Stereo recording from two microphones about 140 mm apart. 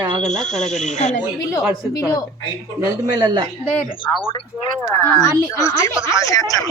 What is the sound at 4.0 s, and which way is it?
Speech, 40° left (ahead or behind).